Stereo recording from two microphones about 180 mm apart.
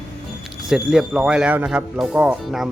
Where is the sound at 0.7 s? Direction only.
5° right (ahead or behind).